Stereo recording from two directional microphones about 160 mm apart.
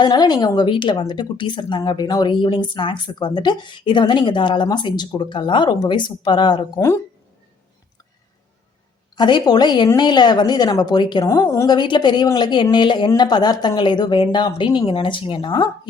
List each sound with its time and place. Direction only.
0.0 s a woman's voice: 25° left (ahead or behind)
9.1 s a woman's voice: 25° left (ahead or behind)